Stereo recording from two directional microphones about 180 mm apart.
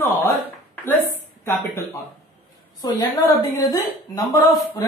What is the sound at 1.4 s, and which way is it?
Speech, 15° left (ahead or behind).